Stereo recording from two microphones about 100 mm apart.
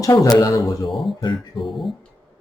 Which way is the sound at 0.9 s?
Centre (ahead or behind).